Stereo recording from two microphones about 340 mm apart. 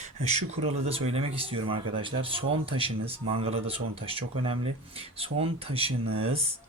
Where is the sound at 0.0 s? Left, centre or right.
Centre.